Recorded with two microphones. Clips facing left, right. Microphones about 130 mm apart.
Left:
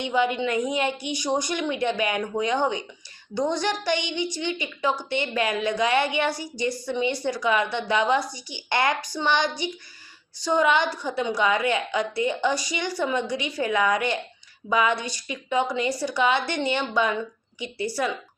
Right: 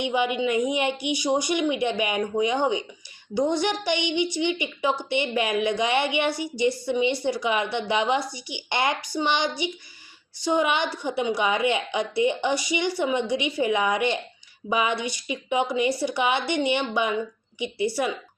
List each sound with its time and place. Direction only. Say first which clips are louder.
0.0 s a woman's voice: even; 15° right (ahead or behind)